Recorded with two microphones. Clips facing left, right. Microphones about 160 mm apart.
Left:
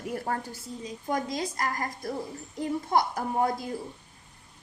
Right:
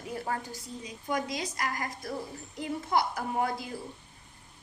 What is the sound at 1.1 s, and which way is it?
Speech, 45° left (ahead or behind).